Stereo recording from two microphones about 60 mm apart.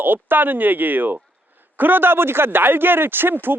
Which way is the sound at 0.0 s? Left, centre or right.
Right.